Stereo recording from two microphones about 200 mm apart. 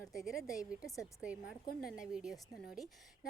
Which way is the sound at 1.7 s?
50° left (ahead or behind).